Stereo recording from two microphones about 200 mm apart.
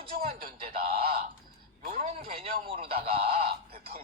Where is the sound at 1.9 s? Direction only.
45° right (ahead or behind).